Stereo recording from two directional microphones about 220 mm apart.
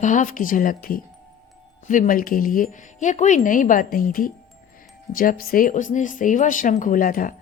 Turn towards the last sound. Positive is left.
turn(degrees=40)  # may be behind; listen again after turning